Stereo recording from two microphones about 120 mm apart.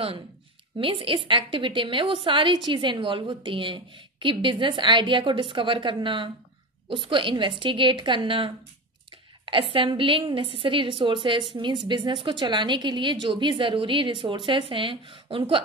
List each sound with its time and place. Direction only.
0.7 s a woman's voice: 45° right (ahead or behind)